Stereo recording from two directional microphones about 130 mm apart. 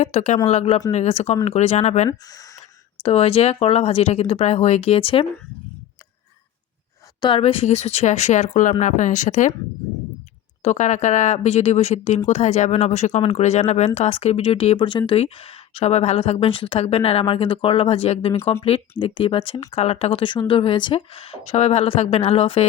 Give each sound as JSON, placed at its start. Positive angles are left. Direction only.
{"t": 0.0, "sound": "speech", "side_deg": 60}
{"t": 2.0, "sound": "speech", "side_deg": 30}
{"t": 2.6, "sound": "speech", "side_deg": 50}
{"t": 7.2, "sound": "speech", "side_deg": 40}
{"t": 10.6, "sound": "speech", "side_deg": 65}